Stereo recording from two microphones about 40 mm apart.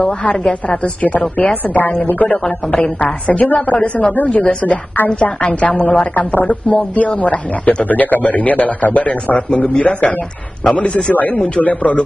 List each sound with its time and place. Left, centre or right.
1.4 s a man's voice: left
4.9 s a woman's voice: left
5.4 s a man's voice: left